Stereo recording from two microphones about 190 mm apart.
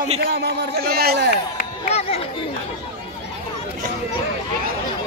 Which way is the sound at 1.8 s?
30° left (ahead or behind).